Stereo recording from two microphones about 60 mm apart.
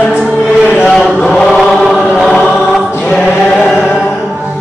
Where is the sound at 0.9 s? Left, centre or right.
Centre.